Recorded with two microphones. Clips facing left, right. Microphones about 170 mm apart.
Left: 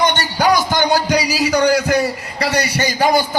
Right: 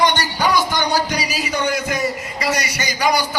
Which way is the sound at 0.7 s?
80° left.